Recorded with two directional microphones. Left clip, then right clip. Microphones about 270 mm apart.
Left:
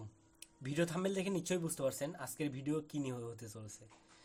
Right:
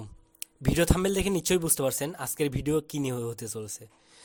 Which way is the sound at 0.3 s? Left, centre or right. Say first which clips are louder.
Right 11 dB; right.